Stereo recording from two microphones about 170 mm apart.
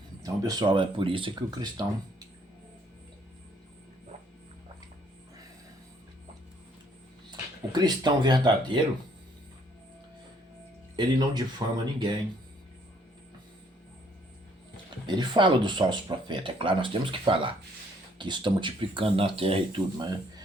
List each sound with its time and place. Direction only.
0.2 s speech: 20° right (ahead or behind)
7.3 s speech: 25° right (ahead or behind)
10.9 s speech: 25° right (ahead or behind)
15.0 s speech: 25° right (ahead or behind)